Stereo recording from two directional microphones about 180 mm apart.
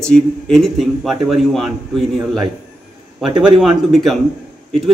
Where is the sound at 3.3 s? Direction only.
25° right (ahead or behind).